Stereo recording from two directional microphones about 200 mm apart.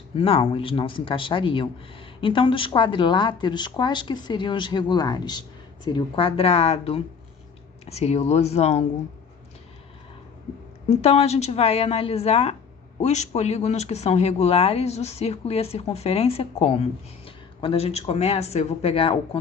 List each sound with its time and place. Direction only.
0.2 s speech: 25° left (ahead or behind)
10.8 s speech: 30° left (ahead or behind)